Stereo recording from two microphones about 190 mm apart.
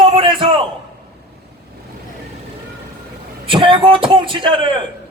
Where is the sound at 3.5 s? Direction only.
25° right (ahead or behind).